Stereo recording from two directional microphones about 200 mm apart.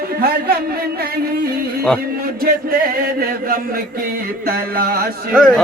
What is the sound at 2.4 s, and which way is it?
Chant, 45° right (ahead or behind).